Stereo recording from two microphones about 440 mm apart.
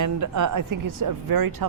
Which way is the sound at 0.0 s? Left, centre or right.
Right.